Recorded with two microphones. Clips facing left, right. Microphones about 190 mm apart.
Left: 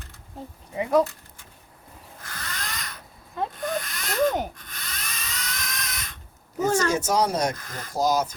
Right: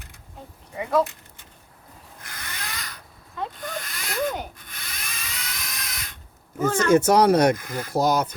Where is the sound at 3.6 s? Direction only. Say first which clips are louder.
Left 5 dB; centre (ahead or behind).